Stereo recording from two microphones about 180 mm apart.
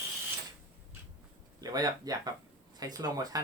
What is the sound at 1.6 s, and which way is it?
Speech, 20° right (ahead or behind).